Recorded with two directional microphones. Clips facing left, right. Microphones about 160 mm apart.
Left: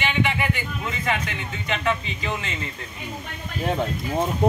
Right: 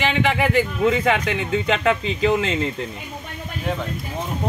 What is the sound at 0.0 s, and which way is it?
Speech, 90° right.